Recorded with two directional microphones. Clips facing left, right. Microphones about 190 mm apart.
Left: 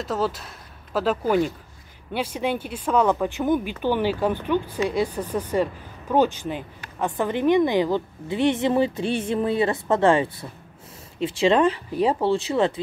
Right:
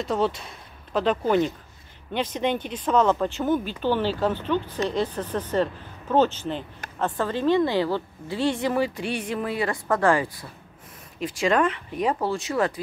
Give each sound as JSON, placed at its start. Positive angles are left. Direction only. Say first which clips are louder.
{"t": 0.0, "sound": "a woman's voice", "louder": "right 1 dB", "side_deg": 5}